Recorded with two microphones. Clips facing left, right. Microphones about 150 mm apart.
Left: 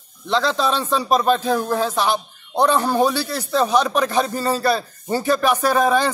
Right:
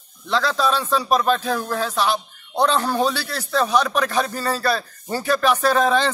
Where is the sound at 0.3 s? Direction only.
20° left (ahead or behind).